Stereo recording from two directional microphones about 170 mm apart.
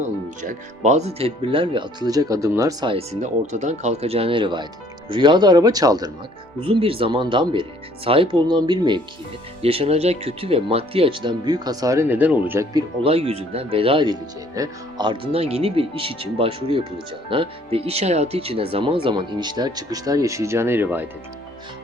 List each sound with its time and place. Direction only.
0.4 s speech: 45° right (ahead or behind); by 2.9 s 20° right (ahead or behind)
2.9 s speech: 40° right (ahead or behind); by 12.8 s 15° right (ahead or behind)
13.0 s speech: 35° right (ahead or behind); by 21.1 s 10° right (ahead or behind)